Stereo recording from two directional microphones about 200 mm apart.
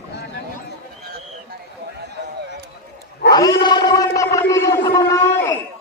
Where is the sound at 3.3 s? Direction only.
20° left (ahead or behind).